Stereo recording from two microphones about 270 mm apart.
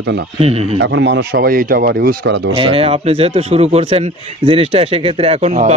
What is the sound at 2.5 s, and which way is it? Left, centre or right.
Speech, right.